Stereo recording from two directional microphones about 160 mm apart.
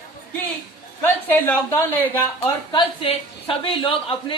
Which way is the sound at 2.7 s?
30° left (ahead or behind).